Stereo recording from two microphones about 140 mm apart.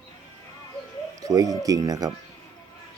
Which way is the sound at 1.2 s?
25° right (ahead or behind).